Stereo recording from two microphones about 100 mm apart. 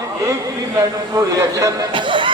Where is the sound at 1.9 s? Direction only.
55° right (ahead or behind).